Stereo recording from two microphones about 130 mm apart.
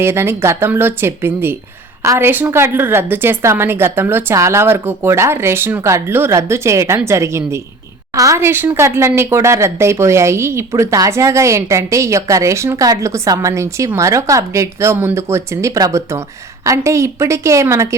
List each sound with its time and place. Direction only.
0.0 s speech: 20° right (ahead or behind)